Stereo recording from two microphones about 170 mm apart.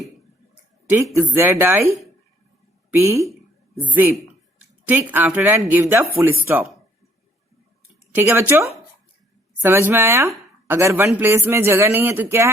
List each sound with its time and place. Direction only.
0.9 s speech: 15° right (ahead or behind)
2.9 s speech: 15° right (ahead or behind)
8.1 s speech: 15° right (ahead or behind)